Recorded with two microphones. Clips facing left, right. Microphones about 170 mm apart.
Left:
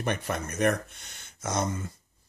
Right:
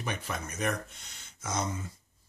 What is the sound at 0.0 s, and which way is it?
Speech, 60° left (ahead or behind).